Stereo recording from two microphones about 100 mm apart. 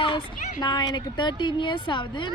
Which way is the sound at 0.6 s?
45° left (ahead or behind).